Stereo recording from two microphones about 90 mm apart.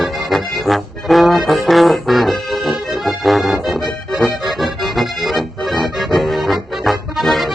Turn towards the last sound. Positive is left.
turn(degrees=0)  # may be behind; listen again after turning